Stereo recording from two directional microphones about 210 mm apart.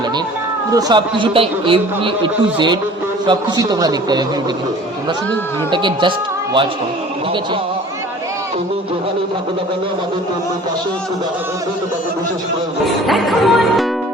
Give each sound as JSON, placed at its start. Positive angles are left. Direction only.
{"t": 0.7, "sound": "a man's voice", "side_deg": -15}
{"t": 5.7, "sound": "a man's voice", "side_deg": -20}
{"t": 13.1, "sound": "music", "side_deg": 0}